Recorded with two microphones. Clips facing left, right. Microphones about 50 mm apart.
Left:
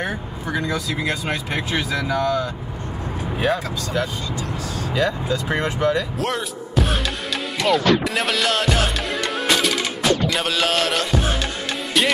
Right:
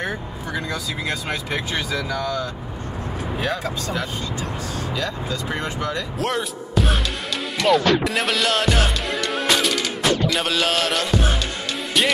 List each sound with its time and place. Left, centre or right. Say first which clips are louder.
0.0 s speech: left 1 dB; centre
4.4 s speech: left 1 dB; right
4.9 s speech: left 8 dB; centre
6.1 s music: even; centre